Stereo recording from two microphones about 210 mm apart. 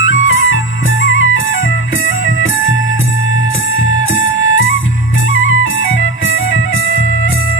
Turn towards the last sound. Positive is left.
turn(degrees=70)  # may be behind; listen again after turning